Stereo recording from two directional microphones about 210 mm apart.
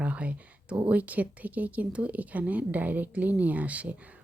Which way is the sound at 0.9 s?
5° right (ahead or behind).